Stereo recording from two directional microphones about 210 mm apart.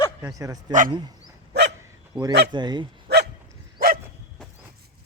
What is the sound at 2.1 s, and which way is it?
Speech, 15° right (ahead or behind).